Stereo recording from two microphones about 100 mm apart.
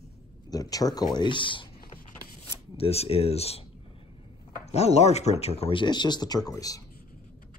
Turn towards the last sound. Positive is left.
turn(degrees=35)  # may be behind; listen again after turning